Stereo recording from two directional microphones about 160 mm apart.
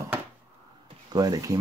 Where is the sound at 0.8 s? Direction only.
25° right (ahead or behind).